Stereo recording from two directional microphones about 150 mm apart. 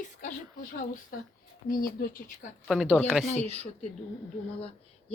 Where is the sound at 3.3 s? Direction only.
45° left (ahead or behind).